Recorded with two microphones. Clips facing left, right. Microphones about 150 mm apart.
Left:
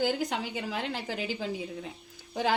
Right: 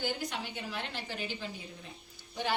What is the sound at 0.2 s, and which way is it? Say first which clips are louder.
A woman's voice: left 6 dB; 90° left.